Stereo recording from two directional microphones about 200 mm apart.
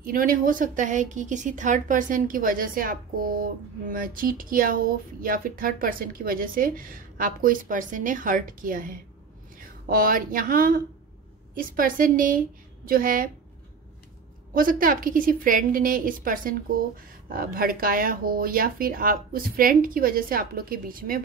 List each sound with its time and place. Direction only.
0.0 s speech: 45° right (ahead or behind)
14.5 s speech: 45° right (ahead or behind)